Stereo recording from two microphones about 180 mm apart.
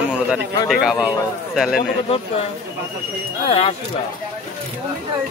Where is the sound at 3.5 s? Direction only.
30° left (ahead or behind).